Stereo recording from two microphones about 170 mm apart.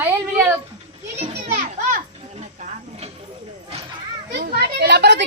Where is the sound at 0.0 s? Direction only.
15° right (ahead or behind).